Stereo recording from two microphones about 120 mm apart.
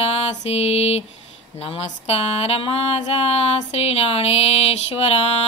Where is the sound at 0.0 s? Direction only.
55° left (ahead or behind).